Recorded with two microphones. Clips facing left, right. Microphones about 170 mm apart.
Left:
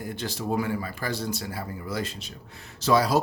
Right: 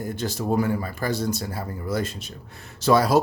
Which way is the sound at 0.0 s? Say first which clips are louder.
Right 4 dB; 45° right (ahead or behind).